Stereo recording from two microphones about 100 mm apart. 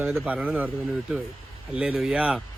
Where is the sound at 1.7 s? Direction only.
10° right (ahead or behind).